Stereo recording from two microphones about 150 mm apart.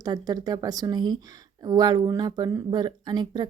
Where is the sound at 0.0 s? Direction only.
25° right (ahead or behind).